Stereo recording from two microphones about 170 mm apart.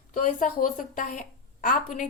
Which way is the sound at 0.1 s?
50° left (ahead or behind).